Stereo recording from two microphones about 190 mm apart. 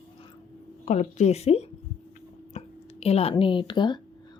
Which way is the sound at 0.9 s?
40° left (ahead or behind).